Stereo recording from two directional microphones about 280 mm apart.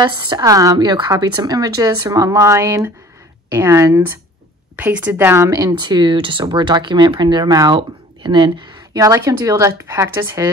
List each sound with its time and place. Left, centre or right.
0.0 s speech: centre